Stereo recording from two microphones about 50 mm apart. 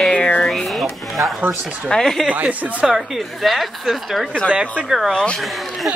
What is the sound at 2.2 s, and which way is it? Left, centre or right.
Speech, right.